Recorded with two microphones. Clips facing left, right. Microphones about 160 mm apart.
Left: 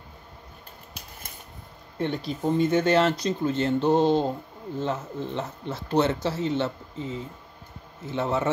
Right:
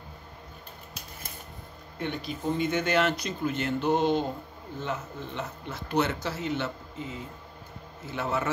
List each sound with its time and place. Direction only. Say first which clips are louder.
2.0 s speech: left 5 dB; 30° left (ahead or behind)